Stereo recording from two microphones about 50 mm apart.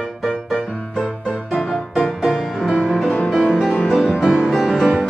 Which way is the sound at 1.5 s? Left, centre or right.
Centre.